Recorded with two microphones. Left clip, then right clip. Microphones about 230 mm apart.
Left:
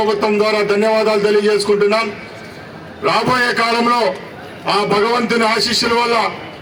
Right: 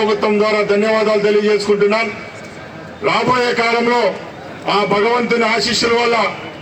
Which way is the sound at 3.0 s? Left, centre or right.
Left.